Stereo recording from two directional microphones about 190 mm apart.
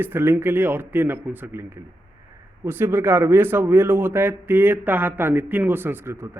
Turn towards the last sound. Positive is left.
turn(degrees=-15)  # may be behind; listen again after turning